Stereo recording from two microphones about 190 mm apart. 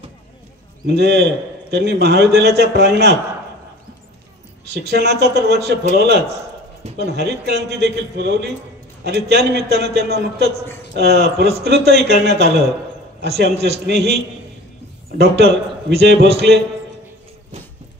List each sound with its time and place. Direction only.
0.8 s a man's voice: 60° right (ahead or behind)
4.6 s a man's voice: 60° right (ahead or behind)